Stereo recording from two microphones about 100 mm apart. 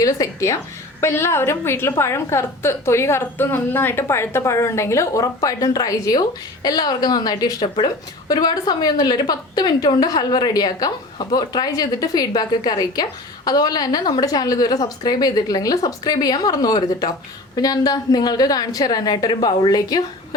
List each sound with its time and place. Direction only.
0.0 s a woman's voice: 35° left (ahead or behind)